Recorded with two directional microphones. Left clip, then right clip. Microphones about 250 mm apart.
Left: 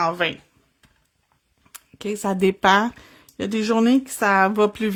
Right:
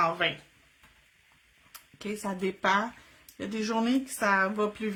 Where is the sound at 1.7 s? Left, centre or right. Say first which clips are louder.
Left 9 dB; left.